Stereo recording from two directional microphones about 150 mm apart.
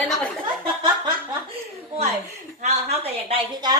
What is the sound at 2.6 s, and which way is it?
Speech, 45° right (ahead or behind).